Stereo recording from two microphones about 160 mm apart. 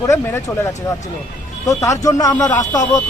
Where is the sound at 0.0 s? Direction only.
20° left (ahead or behind).